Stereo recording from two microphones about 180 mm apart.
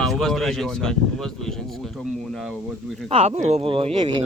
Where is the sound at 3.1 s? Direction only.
35° right (ahead or behind).